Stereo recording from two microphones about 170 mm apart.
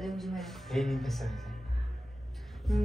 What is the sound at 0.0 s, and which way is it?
Music, centre (ahead or behind).